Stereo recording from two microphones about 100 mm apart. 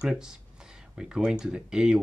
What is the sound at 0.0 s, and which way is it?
Speech, 10° right (ahead or behind).